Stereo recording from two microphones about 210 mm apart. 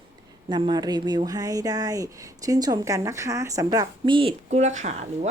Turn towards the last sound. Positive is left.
turn(degrees=-35)  # may be behind; listen again after turning